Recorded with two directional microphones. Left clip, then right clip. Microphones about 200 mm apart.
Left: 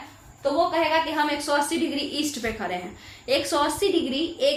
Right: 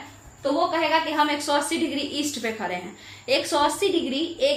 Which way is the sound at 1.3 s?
10° right (ahead or behind).